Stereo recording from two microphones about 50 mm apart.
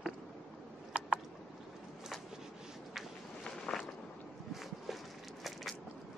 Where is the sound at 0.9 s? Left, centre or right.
Right.